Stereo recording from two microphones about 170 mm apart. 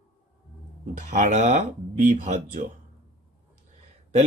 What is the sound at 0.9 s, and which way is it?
Speech, 45° right (ahead or behind).